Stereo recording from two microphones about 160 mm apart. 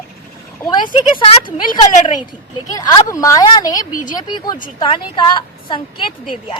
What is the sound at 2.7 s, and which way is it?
A woman's voice, 25° left (ahead or behind).